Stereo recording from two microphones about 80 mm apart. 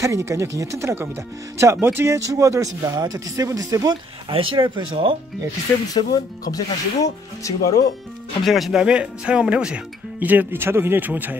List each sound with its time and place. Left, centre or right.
0.0 s speech: right
2.2 s speech: right
3.9 s speech: right
5.9 s speech: left
8.5 s speech: centre
10.2 s speech: right